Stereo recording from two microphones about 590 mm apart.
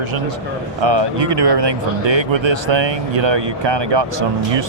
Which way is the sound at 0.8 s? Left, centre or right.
Right.